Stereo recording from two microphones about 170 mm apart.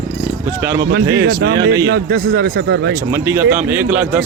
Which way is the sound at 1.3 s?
60° right (ahead or behind).